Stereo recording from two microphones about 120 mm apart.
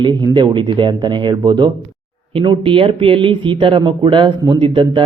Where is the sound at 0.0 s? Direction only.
40° right (ahead or behind).